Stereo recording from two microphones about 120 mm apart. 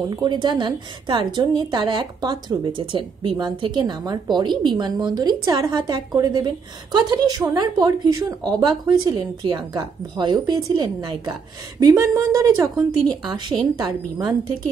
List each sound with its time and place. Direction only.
0.1 s a woman's voice: 40° right (ahead or behind)